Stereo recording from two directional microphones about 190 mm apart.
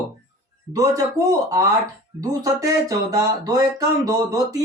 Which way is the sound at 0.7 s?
20° right (ahead or behind).